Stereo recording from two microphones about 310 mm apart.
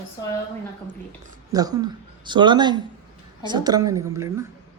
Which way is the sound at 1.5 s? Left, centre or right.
Centre.